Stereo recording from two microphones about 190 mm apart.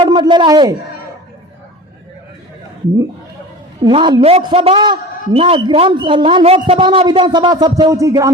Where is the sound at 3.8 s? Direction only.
25° right (ahead or behind).